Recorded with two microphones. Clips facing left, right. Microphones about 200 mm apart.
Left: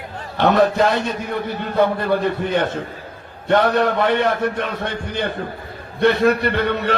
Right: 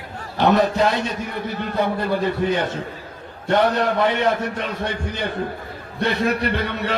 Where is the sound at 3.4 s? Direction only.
55° left (ahead or behind).